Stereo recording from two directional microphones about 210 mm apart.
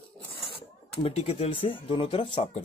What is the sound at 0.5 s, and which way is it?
Speech, 25° left (ahead or behind).